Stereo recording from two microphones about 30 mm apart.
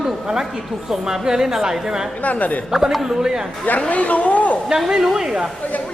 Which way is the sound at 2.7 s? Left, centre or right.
Centre.